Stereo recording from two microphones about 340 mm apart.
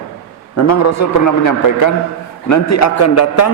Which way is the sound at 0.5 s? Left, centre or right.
Left.